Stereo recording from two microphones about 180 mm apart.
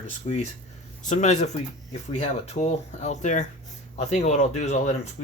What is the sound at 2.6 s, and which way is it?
Speech, 40° left (ahead or behind).